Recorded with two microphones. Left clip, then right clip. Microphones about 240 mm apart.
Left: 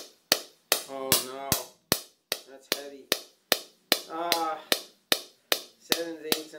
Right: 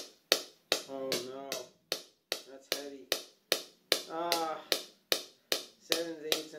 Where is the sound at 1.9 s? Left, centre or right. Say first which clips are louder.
Left 8 dB; centre.